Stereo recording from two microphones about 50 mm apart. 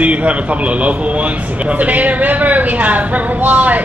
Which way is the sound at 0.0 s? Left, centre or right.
Right.